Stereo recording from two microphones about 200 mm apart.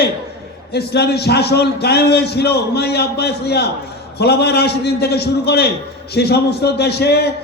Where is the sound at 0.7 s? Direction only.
55° left (ahead or behind).